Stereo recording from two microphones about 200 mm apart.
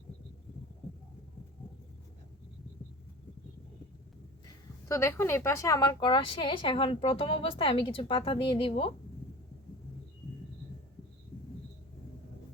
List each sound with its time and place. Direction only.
4.4 s speech: 15° left (ahead or behind)